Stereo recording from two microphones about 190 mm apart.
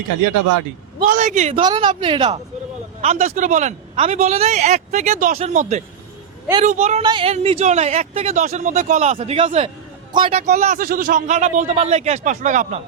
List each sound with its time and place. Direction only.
1.0 s a woman's voice: 40° right (ahead or behind)
1.6 s a woman's voice: 20° right (ahead or behind)
10.3 s a woman's voice: 40° right (ahead or behind)